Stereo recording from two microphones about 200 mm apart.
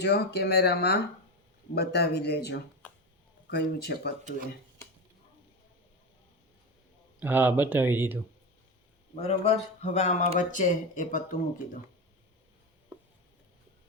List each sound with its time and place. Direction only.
0.0 s speech: 55° left (ahead or behind)
7.2 s speech: 10° right (ahead or behind)
9.2 s speech: 30° left (ahead or behind)
12.9 s a sound: 10° right (ahead or behind)